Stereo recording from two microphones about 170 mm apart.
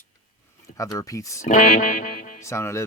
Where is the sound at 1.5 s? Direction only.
50° left (ahead or behind).